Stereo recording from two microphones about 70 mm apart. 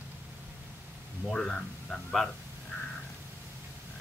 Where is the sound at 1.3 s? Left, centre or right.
Centre.